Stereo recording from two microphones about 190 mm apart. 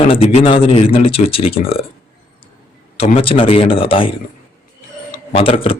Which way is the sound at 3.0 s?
30° left (ahead or behind).